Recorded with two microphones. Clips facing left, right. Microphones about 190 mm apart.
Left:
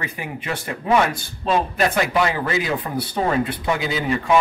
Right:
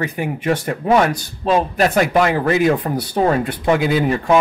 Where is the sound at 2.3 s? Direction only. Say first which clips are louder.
Right 7 dB; 50° right (ahead or behind).